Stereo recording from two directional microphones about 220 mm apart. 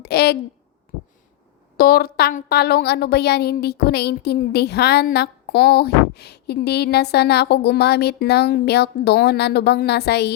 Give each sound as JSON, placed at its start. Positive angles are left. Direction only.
{"t": 0.0, "sound": "speech", "side_deg": 45}
{"t": 1.7, "sound": "a woman's voice", "side_deg": 45}